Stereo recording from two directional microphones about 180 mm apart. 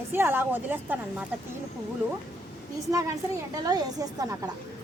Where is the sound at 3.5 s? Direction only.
20° right (ahead or behind).